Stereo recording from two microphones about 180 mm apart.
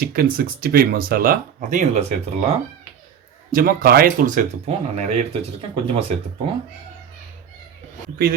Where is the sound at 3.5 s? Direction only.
55° right (ahead or behind); by 6.1 s 30° right (ahead or behind).